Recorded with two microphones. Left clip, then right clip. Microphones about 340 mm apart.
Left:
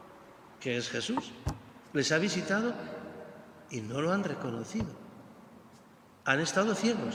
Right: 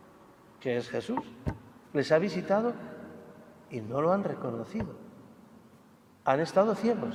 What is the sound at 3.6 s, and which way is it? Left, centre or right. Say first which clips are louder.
A man's voice: right 4 dB; centre.